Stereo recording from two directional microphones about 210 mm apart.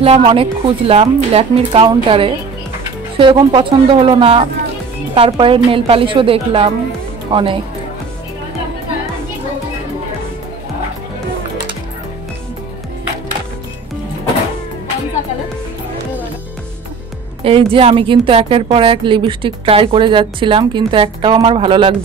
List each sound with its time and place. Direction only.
0.0 s a woman's voice: 25° right (ahead or behind)
17.4 s a woman's voice: 25° right (ahead or behind)